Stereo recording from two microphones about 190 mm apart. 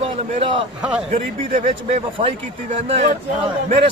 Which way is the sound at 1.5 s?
45° right (ahead or behind).